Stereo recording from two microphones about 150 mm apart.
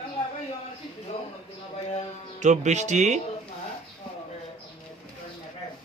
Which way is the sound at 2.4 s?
50° right (ahead or behind).